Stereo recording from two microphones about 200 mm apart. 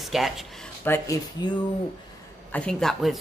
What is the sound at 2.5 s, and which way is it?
Speech, 5° left (ahead or behind).